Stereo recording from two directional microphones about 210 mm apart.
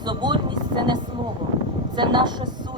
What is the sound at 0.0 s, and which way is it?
Speech, 20° right (ahead or behind).